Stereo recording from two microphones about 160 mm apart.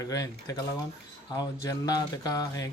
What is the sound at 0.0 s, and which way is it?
Speech, 20° left (ahead or behind).